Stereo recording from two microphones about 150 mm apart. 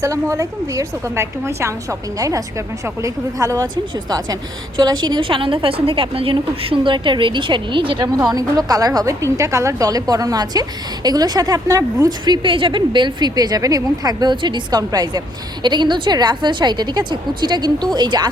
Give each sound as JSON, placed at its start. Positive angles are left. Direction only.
{"t": 0.0, "sound": "a woman's voice", "side_deg": -20}